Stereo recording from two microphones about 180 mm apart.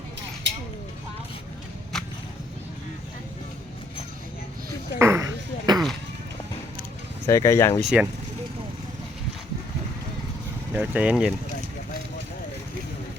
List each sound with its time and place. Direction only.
4.9 s a sound: 15° right (ahead or behind)
7.3 s speech: 15° left (ahead or behind)
7.8 s speech: 5° right (ahead or behind)
10.8 s speech: 5° right (ahead or behind)